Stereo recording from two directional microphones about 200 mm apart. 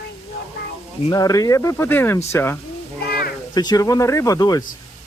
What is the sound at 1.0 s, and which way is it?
Speech, 20° left (ahead or behind).